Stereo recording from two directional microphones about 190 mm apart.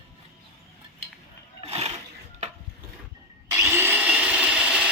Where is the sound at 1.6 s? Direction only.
30° right (ahead or behind).